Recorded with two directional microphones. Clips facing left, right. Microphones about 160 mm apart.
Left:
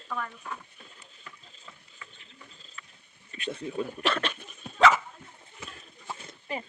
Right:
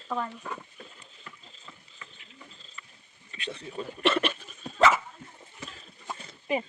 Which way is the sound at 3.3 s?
50° left (ahead or behind).